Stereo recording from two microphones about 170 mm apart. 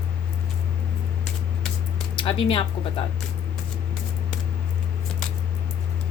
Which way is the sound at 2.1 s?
30° left (ahead or behind).